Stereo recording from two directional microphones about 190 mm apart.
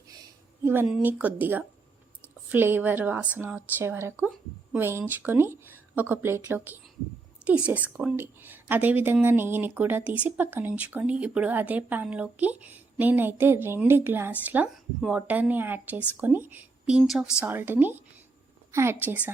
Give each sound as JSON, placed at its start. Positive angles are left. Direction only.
{"t": 0.6, "sound": "speech", "side_deg": -10}